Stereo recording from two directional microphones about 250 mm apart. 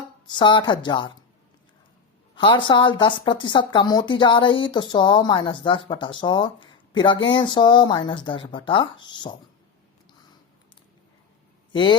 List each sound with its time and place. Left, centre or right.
0.3 s speech: centre
2.3 s speech: centre
11.7 s a man's voice: centre